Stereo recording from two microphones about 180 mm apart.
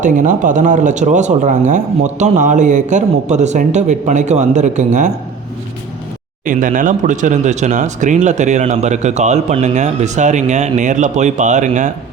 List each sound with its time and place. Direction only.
0.0 s speech: 45° right (ahead or behind)
6.4 s speech: 45° right (ahead or behind)